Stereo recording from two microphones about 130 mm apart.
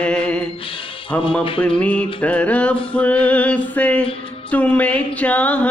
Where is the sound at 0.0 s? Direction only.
10° left (ahead or behind).